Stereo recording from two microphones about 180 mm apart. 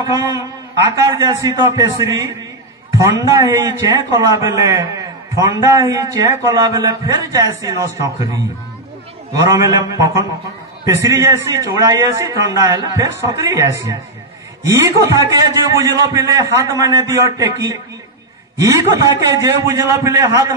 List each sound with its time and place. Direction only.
0.0 s a man's voice: 20° right (ahead or behind)
9.5 s a man's voice: 20° right (ahead or behind)